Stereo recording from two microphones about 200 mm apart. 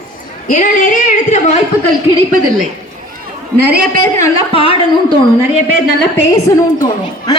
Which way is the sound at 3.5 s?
50° right (ahead or behind).